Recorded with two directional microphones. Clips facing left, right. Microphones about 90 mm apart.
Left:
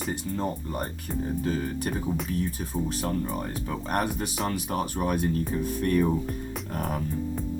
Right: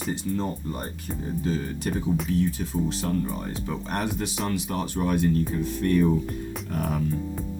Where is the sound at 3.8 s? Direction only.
45° left (ahead or behind).